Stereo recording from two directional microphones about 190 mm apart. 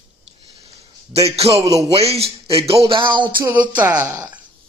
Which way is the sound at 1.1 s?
30° right (ahead or behind).